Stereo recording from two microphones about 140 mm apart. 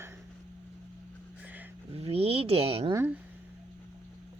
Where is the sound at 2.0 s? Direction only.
45° right (ahead or behind).